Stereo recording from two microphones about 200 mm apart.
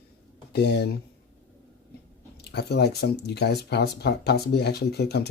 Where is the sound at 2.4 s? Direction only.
55° left (ahead or behind).